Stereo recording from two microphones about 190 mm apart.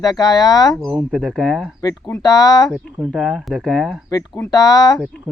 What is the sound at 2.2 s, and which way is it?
Speech, 20° left (ahead or behind).